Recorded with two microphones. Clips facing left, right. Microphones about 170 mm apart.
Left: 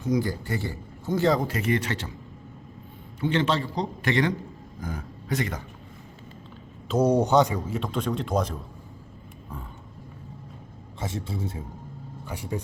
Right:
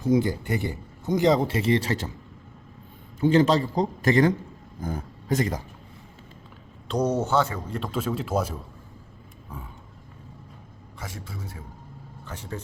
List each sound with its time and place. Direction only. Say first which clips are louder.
0.0 s speech: right 4 dB; 25° right (ahead or behind)
3.2 s a man's voice: right 5 dB; 40° right (ahead or behind)
6.8 s speech: left 3 dB; 5° left (ahead or behind)
7.7 s speech: even; centre (ahead or behind)
11.0 s a man's voice: left 7 dB; 25° left (ahead or behind)
12.2 s speech: left 4 dB; 10° left (ahead or behind)